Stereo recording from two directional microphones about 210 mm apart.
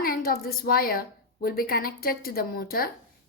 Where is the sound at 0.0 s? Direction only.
45° left (ahead or behind).